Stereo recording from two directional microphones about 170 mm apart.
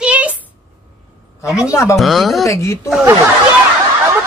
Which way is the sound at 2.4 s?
15° left (ahead or behind).